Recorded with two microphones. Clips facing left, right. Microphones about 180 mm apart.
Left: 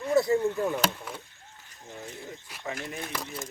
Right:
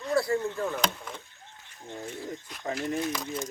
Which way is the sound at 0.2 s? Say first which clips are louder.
Left 4 dB; 20° left (ahead or behind).